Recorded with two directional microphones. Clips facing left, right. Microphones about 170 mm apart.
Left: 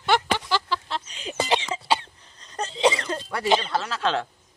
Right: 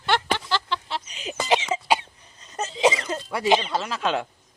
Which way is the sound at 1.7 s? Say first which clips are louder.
Right 2 dB; 10° right (ahead or behind).